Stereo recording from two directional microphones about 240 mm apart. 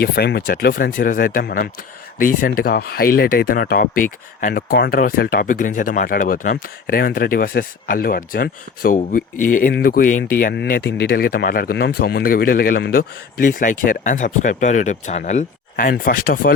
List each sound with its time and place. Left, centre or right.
0.0 s speech: left